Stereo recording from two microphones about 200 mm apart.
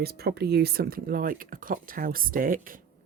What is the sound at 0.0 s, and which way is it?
Speech, 50° right (ahead or behind).